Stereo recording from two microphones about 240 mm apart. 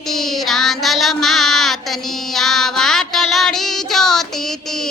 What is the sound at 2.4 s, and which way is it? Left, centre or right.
Music, centre.